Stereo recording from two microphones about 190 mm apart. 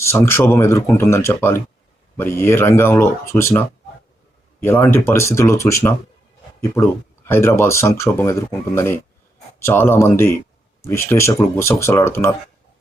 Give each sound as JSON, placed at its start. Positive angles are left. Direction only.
{"t": 0.0, "sound": "speech", "side_deg": 15}
{"t": 7.3, "sound": "speech", "side_deg": 15}